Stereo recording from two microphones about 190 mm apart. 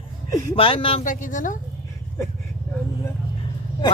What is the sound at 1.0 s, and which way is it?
Speech, 45° left (ahead or behind).